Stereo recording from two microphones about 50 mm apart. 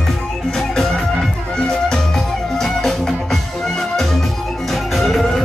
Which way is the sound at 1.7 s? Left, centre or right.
Centre.